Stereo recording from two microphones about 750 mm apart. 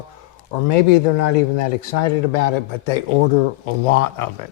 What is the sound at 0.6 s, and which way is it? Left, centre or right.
Speech, left.